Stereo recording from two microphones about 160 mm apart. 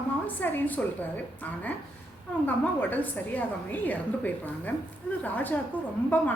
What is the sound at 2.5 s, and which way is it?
A woman's voice, 10° left (ahead or behind).